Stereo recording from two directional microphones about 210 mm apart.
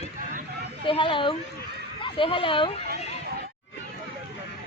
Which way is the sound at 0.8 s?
25° left (ahead or behind).